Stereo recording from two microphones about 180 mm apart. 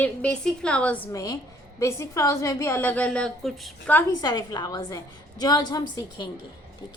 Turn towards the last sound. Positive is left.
turn(degrees=25)  # may be behind; listen again after turning